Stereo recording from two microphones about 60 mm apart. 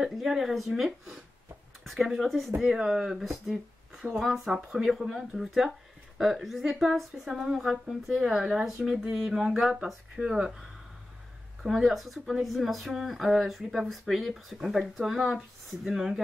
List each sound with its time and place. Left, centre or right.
0.0 s speech: centre
1.9 s speech: centre
10.2 s speech: centre
11.6 s speech: centre